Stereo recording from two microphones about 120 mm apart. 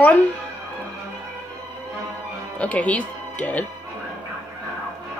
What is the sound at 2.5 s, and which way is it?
Speech, 10° left (ahead or behind).